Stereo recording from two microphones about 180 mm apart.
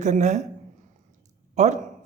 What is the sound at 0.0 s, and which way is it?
Speech, 40° right (ahead or behind).